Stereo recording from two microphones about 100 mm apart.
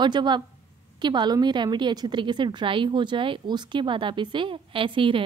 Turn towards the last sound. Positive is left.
turn(degrees=-60)  # may be behind; listen again after turning